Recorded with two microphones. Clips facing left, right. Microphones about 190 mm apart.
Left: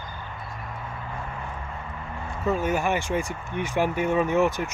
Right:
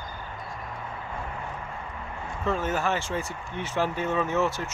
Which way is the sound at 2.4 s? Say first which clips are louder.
Left 3 dB; 10° left (ahead or behind).